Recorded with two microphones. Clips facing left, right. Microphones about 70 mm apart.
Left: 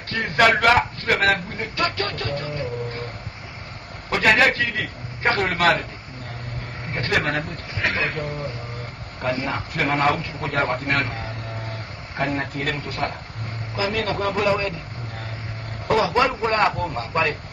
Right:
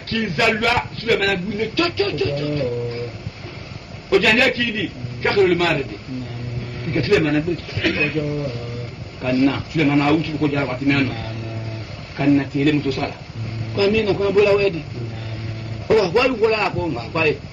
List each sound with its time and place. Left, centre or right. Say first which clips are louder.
0.1 s a man's voice: left 1 dB; left
2.0 s speech: right 6 dB; left
2.4 s a man's voice: right 7 dB; left
4.1 s a man's voice: right 2 dB; left
6.9 s a man's voice: right 6 dB; left
9.4 s a man's voice: right 9 dB; left
9.8 s a man's voice: right 4 dB; left
12.2 s a man's voice: right 8 dB; left
12.8 s a man's voice: right 4 dB; left
15.9 s a man's voice: right 3 dB; left